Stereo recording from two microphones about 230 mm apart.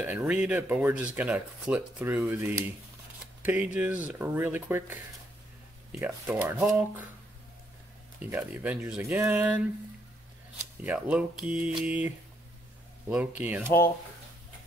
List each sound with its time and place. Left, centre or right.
0.0 s speech: centre
8.2 s speech: centre
10.9 s speech: centre
13.1 s speech: centre